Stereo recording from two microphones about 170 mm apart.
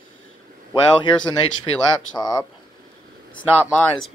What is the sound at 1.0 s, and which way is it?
Speech, 25° left (ahead or behind).